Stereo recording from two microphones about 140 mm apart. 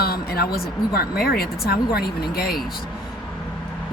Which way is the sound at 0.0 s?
90° left.